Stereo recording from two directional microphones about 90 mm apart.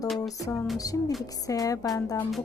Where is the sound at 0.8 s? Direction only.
40° left (ahead or behind).